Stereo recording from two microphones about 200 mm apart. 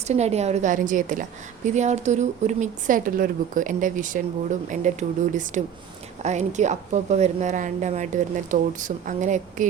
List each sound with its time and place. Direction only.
0.1 s a woman's voice: 35° right (ahead or behind)